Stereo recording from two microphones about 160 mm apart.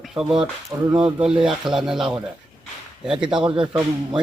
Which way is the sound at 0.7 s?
25° right (ahead or behind).